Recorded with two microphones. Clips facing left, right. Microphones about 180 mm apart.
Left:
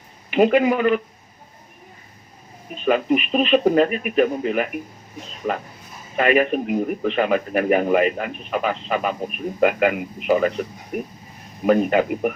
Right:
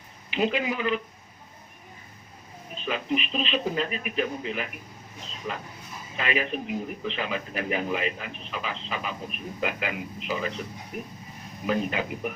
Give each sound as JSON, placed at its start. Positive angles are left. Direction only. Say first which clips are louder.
{"t": 0.3, "sound": "a man's voice", "louder": "left 10 dB", "side_deg": 55}
{"t": 2.8, "sound": "a man's voice", "louder": "left 10 dB", "side_deg": 55}
{"t": 6.1, "sound": "a man's voice", "louder": "left 11 dB", "side_deg": 55}